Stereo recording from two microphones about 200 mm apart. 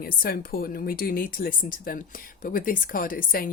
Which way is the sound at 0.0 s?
50° left (ahead or behind).